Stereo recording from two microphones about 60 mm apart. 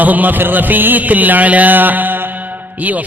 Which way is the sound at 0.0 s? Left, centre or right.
Right.